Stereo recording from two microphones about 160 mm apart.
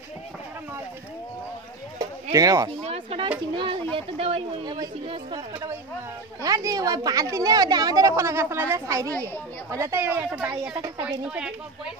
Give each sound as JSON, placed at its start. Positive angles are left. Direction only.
{"t": 2.3, "sound": "a woman's voice", "side_deg": -20}
{"t": 2.8, "sound": "speech", "side_deg": -40}
{"t": 4.6, "sound": "a woman's voice", "side_deg": -25}